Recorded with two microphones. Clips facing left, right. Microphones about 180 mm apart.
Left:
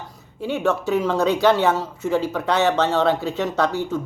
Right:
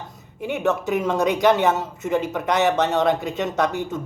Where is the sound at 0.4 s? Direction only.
20° right (ahead or behind).